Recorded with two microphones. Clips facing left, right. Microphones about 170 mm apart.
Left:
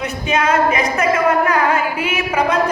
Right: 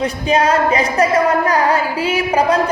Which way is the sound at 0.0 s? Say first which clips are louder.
Right 3 dB; 30° right (ahead or behind).